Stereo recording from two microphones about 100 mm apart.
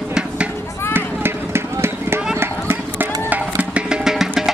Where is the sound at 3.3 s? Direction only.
15° right (ahead or behind).